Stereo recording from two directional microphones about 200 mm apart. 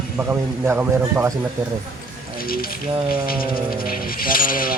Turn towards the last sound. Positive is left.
turn(degrees=45)  # may be behind; listen again after turning